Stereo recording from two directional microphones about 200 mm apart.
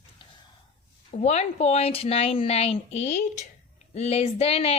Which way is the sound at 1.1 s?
35° left (ahead or behind).